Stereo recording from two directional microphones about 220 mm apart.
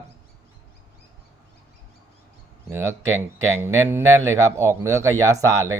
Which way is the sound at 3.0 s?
65° right (ahead or behind).